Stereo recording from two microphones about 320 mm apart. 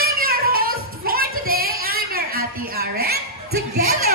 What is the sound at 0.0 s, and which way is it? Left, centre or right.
Music, right.